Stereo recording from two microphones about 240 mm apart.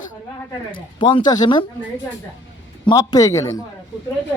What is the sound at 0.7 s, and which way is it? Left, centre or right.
Speech, centre.